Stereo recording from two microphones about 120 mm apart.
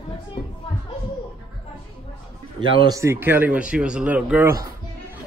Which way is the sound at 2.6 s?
45° right (ahead or behind).